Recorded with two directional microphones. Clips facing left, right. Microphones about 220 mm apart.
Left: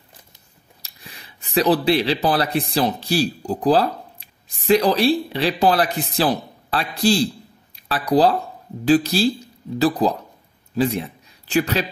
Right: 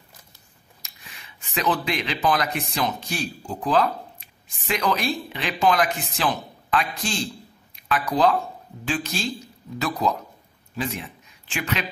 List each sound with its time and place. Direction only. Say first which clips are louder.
0.8 s speech: left 5 dB; 35° left (ahead or behind)